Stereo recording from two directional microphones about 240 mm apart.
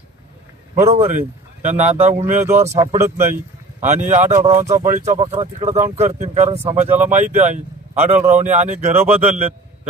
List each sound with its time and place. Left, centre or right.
0.7 s speech: right
2.4 s speech: centre
3.8 s speech: right